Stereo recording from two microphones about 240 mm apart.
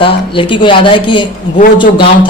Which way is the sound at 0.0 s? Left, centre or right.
Left.